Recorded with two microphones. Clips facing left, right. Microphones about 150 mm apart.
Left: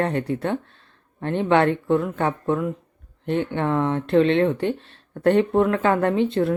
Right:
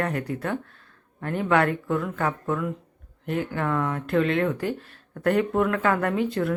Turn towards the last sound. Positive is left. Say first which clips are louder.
# left 4 dB
turn(degrees=25)  # may be behind; listen again after turning